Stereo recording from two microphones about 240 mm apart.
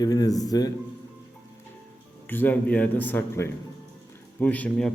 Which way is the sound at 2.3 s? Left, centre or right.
Centre.